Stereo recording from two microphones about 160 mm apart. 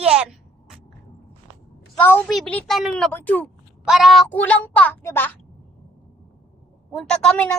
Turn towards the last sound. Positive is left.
turn(degrees=5)  # may be behind; listen again after turning